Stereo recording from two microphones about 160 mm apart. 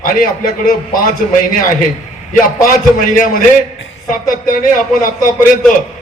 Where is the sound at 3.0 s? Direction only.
55° left (ahead or behind).